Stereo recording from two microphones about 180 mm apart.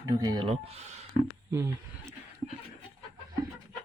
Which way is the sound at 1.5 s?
15° right (ahead or behind).